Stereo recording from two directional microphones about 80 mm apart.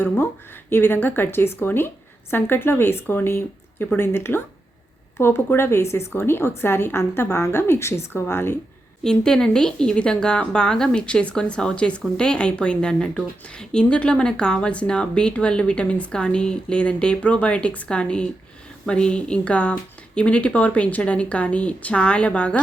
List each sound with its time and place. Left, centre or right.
0.7 s a woman's voice: left
9.0 s a woman's voice: centre